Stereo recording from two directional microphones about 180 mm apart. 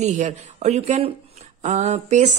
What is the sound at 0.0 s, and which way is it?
A woman's voice, 40° right (ahead or behind).